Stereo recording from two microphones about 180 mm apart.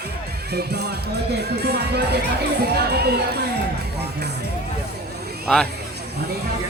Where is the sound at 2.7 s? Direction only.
65° right (ahead or behind).